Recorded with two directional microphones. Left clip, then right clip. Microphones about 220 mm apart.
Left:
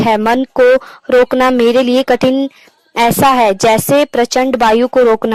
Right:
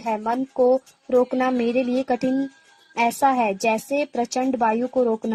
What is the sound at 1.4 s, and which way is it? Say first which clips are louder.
Speech: left 12 dB; 40° left (ahead or behind).